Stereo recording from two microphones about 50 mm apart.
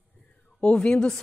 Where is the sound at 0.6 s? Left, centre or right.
Centre.